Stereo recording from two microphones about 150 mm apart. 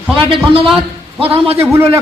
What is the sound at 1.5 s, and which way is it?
Speech, 15° right (ahead or behind).